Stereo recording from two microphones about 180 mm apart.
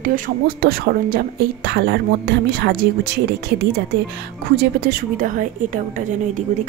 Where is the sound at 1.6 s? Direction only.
65° right (ahead or behind).